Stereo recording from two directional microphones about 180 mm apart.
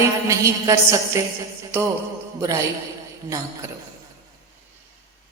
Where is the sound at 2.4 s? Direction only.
15° right (ahead or behind).